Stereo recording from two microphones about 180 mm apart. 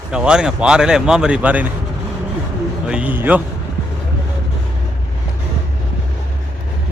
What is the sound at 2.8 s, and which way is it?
Speech, 5° right (ahead or behind).